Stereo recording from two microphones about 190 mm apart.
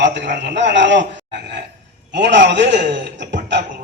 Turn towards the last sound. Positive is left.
turn(degrees=-70)  # may be behind; listen again after turning